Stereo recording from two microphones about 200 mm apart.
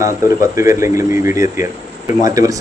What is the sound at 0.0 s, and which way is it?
Speech, 15° right (ahead or behind).